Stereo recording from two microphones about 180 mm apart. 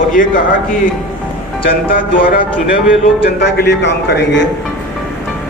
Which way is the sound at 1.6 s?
50° left (ahead or behind).